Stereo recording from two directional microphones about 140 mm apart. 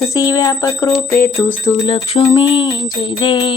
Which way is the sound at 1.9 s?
40° left (ahead or behind).